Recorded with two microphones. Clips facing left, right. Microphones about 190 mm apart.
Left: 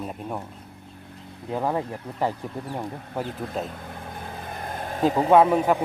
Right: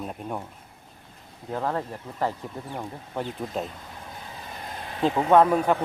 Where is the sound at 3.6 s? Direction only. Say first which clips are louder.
Left 4 dB; 55° left (ahead or behind).